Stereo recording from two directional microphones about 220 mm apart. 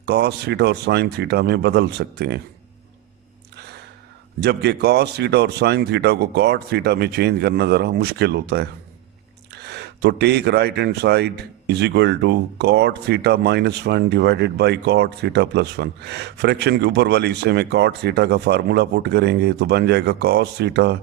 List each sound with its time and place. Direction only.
0.0 s speech: 50° right (ahead or behind)
3.5 s gasp: 50° right (ahead or behind)
4.4 s speech: 50° right (ahead or behind)